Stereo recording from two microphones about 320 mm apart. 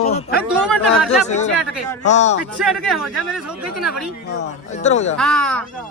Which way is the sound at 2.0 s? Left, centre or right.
Left.